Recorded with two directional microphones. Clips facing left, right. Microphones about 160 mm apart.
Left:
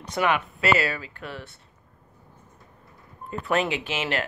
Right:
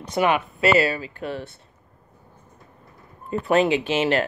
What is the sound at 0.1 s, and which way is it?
Speech, 25° right (ahead or behind).